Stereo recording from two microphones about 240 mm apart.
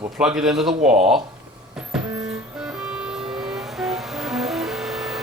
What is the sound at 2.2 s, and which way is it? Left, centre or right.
Vehicle, centre.